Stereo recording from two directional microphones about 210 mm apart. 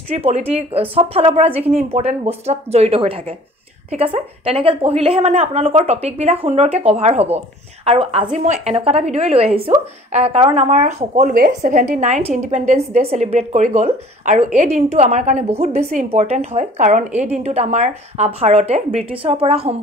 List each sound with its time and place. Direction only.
0.1 s a woman's voice: 30° right (ahead or behind)